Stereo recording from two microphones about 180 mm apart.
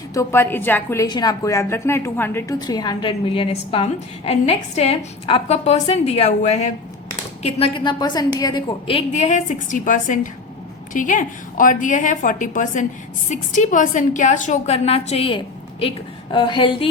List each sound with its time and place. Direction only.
0.1 s a woman's voice: 15° left (ahead or behind)
1.0 s a woman's voice: 25° left (ahead or behind)
2.6 s a woman's voice: 20° left (ahead or behind); by 6.7 s 40° left (ahead or behind)
7.4 s a woman's voice: 30° left (ahead or behind)